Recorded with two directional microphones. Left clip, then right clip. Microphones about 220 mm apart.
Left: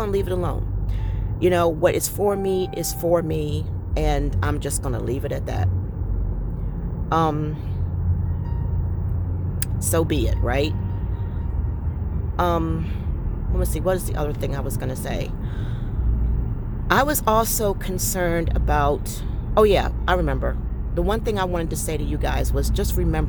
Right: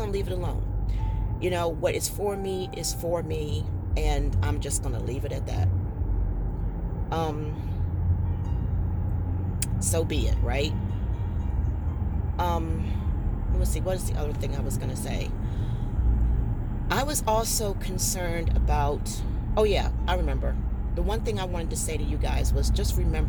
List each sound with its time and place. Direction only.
0.0 s speech: 35° left (ahead or behind)
7.1 s speech: 35° left (ahead or behind)
9.9 s speech: 35° left (ahead or behind)
12.4 s speech: 35° left (ahead or behind)
16.9 s speech: 35° left (ahead or behind)